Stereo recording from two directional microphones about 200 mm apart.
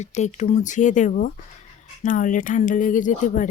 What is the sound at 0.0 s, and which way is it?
Speech, 35° left (ahead or behind).